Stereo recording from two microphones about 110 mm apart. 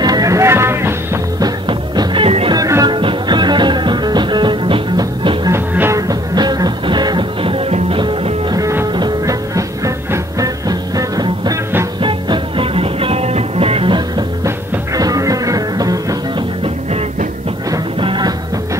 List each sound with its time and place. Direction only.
0.0 s music: 35° right (ahead or behind)
1.4 s music: 45° right (ahead or behind)
2.5 s music: 35° right (ahead or behind)
2.9 s music: 45° right (ahead or behind)
5.5 s music: 25° right (ahead or behind); by 8.4 s 55° right (ahead or behind)
8.5 s music: 30° right (ahead or behind)
12.0 s music: 50° right (ahead or behind)
15.0 s music: 35° right (ahead or behind)
16.3 s music: 65° right (ahead or behind)
18.0 s music: 45° right (ahead or behind)